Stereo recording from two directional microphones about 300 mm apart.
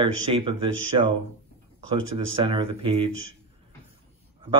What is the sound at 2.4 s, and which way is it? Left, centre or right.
Speech, centre.